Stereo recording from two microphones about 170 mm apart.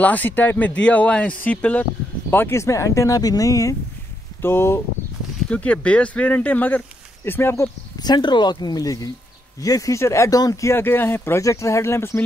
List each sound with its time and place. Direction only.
0.0 s speech: 10° left (ahead or behind)